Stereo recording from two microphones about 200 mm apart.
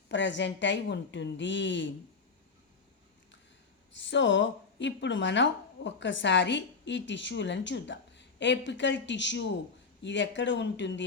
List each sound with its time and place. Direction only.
0.1 s speech: 65° left (ahead or behind)
3.9 s speech: 65° left (ahead or behind)